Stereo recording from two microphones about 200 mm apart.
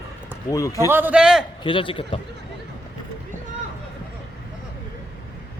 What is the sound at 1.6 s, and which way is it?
Speech, 25° left (ahead or behind).